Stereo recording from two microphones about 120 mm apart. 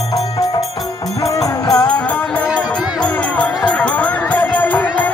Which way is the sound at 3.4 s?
10° left (ahead or behind).